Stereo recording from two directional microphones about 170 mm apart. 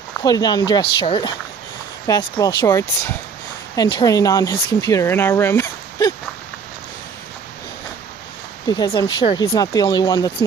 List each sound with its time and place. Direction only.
0.2 s speech: 25° left (ahead or behind)
8.6 s speech: 20° left (ahead or behind)
9.2 s speech: 35° left (ahead or behind)